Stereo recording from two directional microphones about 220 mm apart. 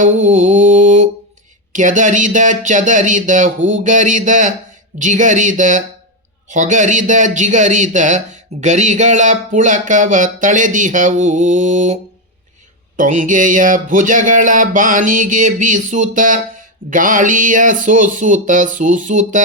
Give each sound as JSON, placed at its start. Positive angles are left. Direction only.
{"t": 0.0, "sound": "mantra", "side_deg": -35}
{"t": 1.7, "sound": "speech", "side_deg": -35}
{"t": 13.0, "sound": "speech", "side_deg": -35}